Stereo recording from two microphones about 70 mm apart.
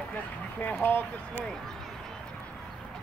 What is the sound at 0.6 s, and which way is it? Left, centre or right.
Speech, left.